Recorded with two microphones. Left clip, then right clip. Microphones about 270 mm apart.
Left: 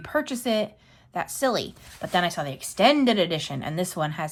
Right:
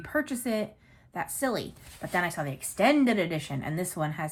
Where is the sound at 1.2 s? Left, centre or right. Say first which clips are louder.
Left 5 dB; centre.